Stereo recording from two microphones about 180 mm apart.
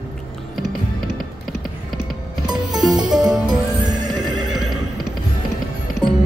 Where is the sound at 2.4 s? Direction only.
25° right (ahead or behind).